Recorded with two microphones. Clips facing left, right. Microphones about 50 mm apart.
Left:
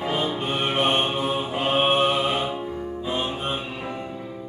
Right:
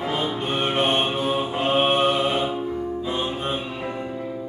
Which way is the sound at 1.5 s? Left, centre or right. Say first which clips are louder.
Even; left.